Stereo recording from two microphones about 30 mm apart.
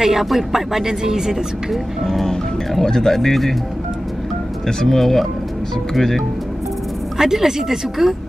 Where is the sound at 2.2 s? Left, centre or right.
Left.